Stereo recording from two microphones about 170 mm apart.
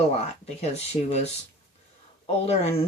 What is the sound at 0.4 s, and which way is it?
Speech, 40° left (ahead or behind).